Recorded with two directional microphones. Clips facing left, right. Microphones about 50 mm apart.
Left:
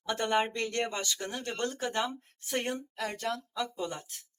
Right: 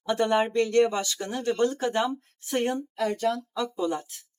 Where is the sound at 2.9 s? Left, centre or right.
Centre.